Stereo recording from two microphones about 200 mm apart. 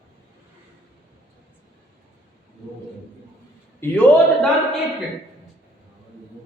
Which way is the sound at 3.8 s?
10° left (ahead or behind).